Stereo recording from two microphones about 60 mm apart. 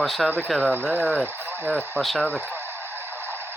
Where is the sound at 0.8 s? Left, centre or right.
Centre.